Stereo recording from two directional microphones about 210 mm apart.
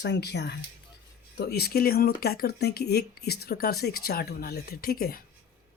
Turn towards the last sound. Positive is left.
turn(degrees=45)  # may be behind; listen again after turning